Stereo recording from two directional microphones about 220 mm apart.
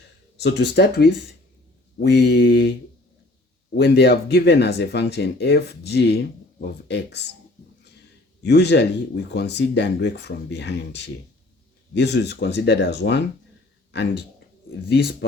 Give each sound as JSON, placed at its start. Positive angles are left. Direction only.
{"t": 0.3, "sound": "speech", "side_deg": 50}
{"t": 3.8, "sound": "speech", "side_deg": 50}
{"t": 8.4, "sound": "speech", "side_deg": 50}